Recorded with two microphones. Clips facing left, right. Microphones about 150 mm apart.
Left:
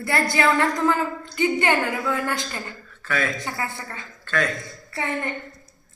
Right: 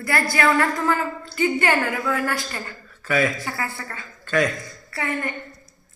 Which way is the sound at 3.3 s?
20° left (ahead or behind).